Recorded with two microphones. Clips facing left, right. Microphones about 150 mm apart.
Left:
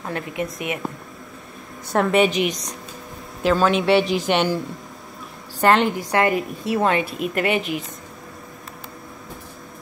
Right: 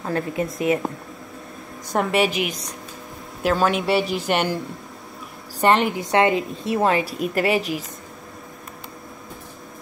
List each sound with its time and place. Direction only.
0.0 s a woman's voice: 30° right (ahead or behind)
2.0 s a man's voice: 5° right (ahead or behind)
5.7 s a man's voice: 5° right (ahead or behind)
6.1 s a woman's voice: 20° right (ahead or behind)